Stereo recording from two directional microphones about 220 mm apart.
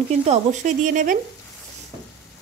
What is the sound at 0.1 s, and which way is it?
Speech, 30° right (ahead or behind).